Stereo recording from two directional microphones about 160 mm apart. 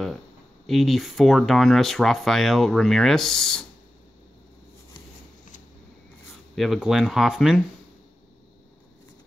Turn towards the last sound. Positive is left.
turn(degrees=0)  # may be behind; listen again after turning